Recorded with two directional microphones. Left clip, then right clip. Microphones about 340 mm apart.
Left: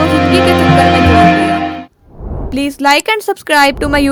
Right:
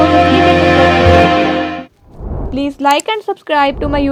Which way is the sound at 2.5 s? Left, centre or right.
Left.